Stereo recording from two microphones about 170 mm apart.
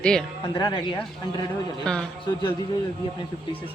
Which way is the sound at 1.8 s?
5° left (ahead or behind).